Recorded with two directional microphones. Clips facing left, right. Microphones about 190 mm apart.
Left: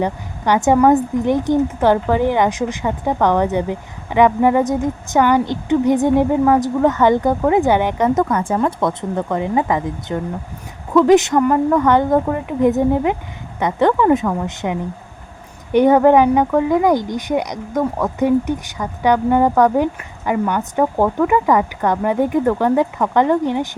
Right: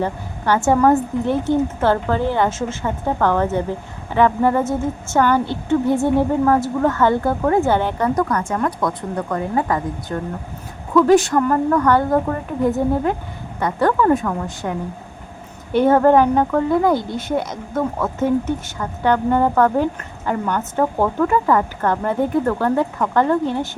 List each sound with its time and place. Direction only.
0.0 s a woman's voice: 15° left (ahead or behind)